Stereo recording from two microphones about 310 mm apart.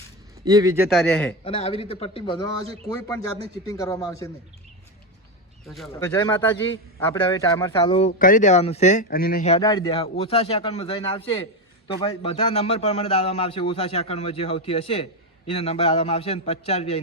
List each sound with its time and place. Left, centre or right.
0.4 s a man's voice: centre
1.5 s a man's voice: centre
3.7 s speech: centre
5.6 s a man's voice: centre